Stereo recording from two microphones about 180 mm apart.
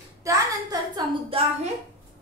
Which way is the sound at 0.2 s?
20° right (ahead or behind).